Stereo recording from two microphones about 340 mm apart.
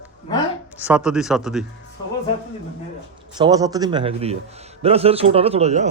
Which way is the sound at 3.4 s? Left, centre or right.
Centre.